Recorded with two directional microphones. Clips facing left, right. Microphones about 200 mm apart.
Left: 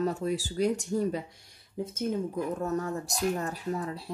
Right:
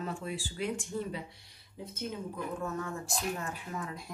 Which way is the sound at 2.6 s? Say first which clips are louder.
Left 6 dB; 40° left (ahead or behind).